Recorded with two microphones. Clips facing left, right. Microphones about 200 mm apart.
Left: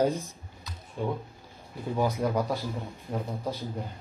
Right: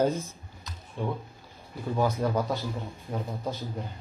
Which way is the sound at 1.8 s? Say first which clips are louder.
Even; 15° left (ahead or behind).